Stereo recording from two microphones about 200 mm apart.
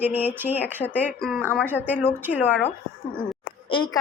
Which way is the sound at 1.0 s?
5° left (ahead or behind).